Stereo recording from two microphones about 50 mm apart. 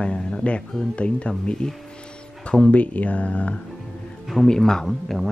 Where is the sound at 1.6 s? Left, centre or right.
Centre.